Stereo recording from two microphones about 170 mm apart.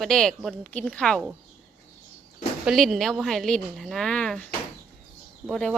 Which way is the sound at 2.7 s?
Centre (ahead or behind).